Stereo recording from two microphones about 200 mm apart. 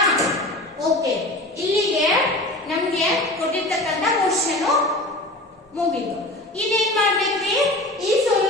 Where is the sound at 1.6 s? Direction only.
15° right (ahead or behind).